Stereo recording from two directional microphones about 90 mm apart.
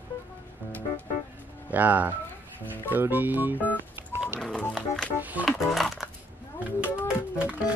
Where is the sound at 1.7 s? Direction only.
20° right (ahead or behind).